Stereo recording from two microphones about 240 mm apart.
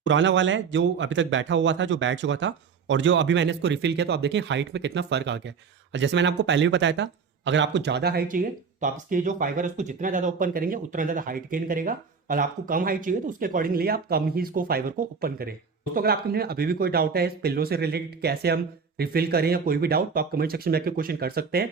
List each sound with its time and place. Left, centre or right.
0.0 s speech: right